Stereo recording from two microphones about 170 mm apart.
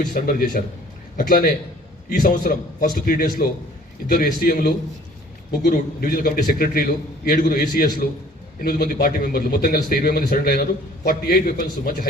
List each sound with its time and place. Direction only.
0.0 s a man's voice: 55° left (ahead or behind)